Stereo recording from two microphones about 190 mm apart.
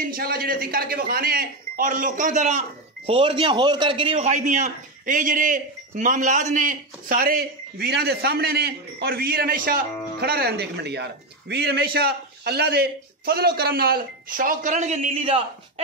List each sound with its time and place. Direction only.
0.1 s a man's voice: 50° right (ahead or behind)
3.1 s a man's voice: 30° right (ahead or behind)